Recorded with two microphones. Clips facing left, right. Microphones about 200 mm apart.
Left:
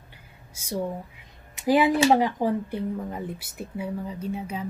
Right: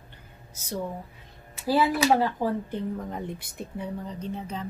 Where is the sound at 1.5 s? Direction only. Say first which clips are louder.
Left 3 dB; 15° left (ahead or behind).